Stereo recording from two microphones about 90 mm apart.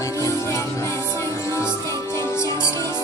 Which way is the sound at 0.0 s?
35° left (ahead or behind).